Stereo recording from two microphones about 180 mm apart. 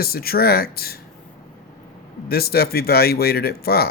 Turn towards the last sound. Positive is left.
turn(degrees=60)  # may be behind; listen again after turning